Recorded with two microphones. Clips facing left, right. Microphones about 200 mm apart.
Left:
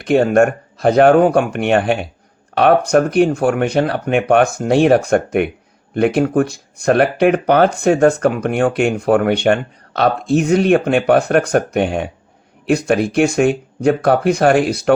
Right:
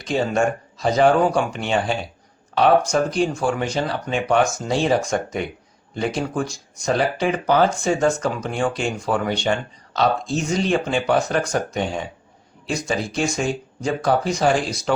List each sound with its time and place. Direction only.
0.0 s speech: 60° left (ahead or behind)